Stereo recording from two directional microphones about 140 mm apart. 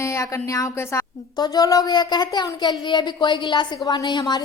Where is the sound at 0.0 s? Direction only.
20° left (ahead or behind).